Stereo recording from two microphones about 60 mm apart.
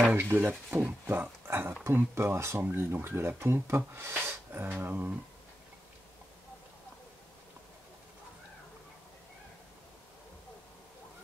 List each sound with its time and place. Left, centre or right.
0.1 s speech: right
1.9 s speech: right